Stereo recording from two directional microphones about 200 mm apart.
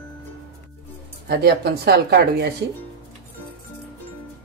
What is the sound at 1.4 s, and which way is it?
Speech, 55° right (ahead or behind).